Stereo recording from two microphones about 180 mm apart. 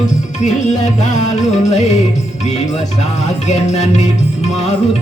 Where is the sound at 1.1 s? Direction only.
40° left (ahead or behind).